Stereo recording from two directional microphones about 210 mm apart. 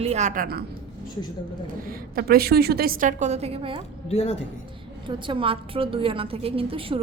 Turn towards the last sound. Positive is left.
turn(degrees=-25)  # may be behind; listen again after turning